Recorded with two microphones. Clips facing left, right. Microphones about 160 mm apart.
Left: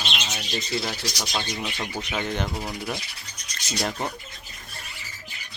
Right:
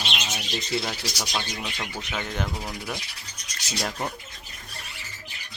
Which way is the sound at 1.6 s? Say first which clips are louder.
Left 3 dB; 10° left (ahead or behind).